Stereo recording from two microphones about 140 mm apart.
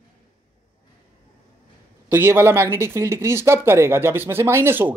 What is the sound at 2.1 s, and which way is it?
Speech, 15° right (ahead or behind).